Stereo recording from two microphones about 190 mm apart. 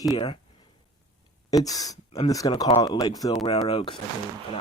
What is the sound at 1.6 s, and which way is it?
Speech, 20° left (ahead or behind).